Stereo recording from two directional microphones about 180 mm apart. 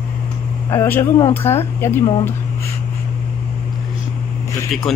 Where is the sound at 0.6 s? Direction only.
15° left (ahead or behind).